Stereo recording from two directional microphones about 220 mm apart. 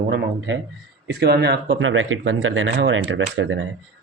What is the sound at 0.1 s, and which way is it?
Speech, 55° right (ahead or behind).